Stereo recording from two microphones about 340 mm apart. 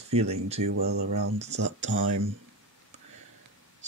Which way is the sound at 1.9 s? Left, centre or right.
Right.